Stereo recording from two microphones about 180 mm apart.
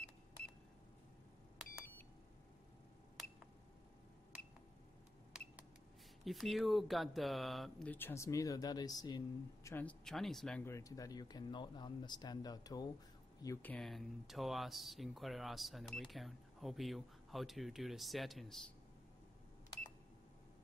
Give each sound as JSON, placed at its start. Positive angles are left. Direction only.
{"t": 6.2, "sound": "speech", "side_deg": 0}